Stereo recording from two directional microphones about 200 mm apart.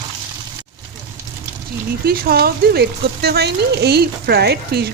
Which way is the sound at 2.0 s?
50° right (ahead or behind).